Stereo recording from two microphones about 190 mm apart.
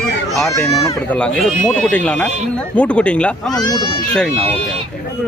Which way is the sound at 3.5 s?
20° left (ahead or behind).